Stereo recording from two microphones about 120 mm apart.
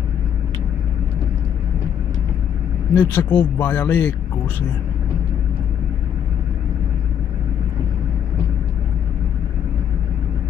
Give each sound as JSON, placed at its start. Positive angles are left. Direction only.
{"t": 3.0, "sound": "speech", "side_deg": 15}